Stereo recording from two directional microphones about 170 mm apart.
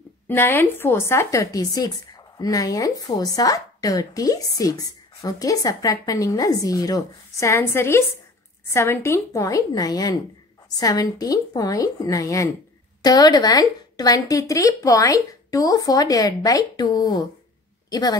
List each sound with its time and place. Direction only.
0.3 s a woman's voice: 10° left (ahead or behind)